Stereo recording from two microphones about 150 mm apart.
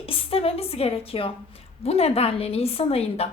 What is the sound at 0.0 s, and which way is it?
A woman's voice, 35° left (ahead or behind).